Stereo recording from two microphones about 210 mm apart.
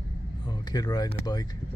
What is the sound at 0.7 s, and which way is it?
Speech, 20° left (ahead or behind).